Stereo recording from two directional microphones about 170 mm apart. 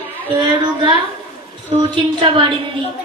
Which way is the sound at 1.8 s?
30° right (ahead or behind).